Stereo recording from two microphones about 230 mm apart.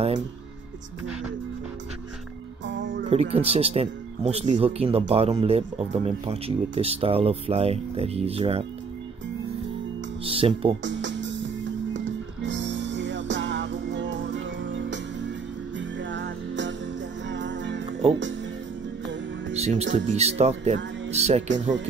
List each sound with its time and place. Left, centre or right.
2.6 s music: right
3.1 s speech: right
10.2 s speech: right
10.8 s music: right
19.5 s speech: right